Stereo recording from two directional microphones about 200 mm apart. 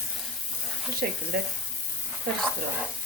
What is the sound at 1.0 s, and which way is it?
Speech, 50° right (ahead or behind).